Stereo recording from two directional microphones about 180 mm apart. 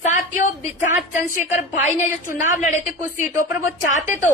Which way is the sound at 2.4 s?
45° left (ahead or behind).